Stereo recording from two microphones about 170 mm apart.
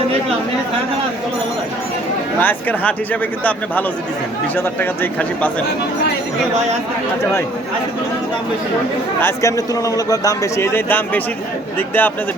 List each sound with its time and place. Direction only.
2.4 s a man's voice: 10° left (ahead or behind)
9.2 s a man's voice: 20° left (ahead or behind)